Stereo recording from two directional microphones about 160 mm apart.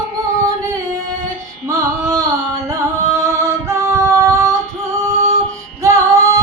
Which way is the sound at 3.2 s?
20° right (ahead or behind).